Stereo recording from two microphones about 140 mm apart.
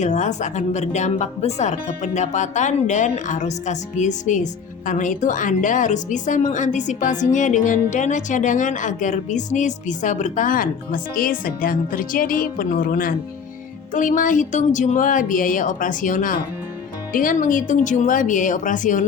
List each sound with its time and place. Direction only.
0.0 s a woman's voice: 60° left (ahead or behind); by 13.1 s 85° left
13.9 s a woman's voice: 70° left (ahead or behind)